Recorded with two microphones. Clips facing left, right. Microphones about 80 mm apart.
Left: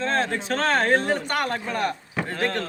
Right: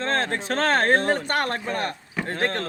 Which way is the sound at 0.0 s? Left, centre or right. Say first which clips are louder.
Left 1 dB; right.